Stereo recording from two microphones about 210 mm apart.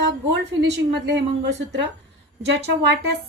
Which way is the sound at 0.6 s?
60° right (ahead or behind).